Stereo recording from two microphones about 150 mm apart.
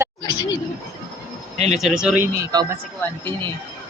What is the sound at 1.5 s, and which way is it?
Speech, 45° right (ahead or behind).